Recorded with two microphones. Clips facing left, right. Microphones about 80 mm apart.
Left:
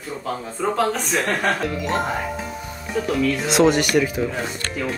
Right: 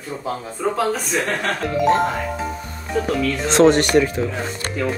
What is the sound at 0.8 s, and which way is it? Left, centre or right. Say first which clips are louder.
Speech: even; centre.